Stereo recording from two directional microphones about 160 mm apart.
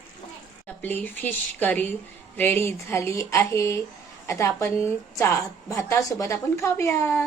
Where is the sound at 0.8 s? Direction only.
10° left (ahead or behind).